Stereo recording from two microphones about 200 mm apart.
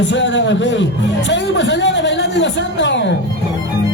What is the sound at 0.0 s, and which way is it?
A woman's voice, 65° left (ahead or behind).